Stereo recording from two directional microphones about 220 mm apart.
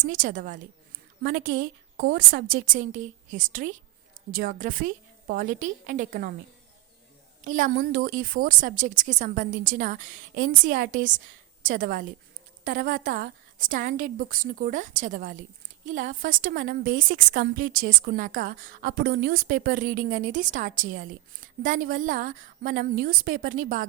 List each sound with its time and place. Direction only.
0.0 s a woman's voice: 40° right (ahead or behind)
7.4 s a woman's voice: 40° right (ahead or behind)